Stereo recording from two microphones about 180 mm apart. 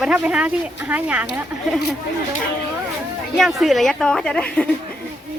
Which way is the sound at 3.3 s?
Centre (ahead or behind).